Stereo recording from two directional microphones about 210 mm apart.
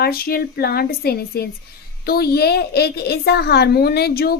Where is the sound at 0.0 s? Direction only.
45° left (ahead or behind).